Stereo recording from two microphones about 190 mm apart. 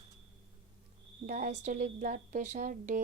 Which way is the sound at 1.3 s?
40° right (ahead or behind).